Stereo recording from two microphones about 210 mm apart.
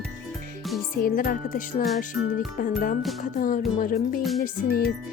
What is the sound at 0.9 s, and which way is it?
Speech, 45° left (ahead or behind).